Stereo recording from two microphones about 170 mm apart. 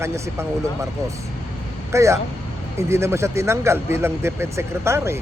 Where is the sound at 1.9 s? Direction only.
15° right (ahead or behind).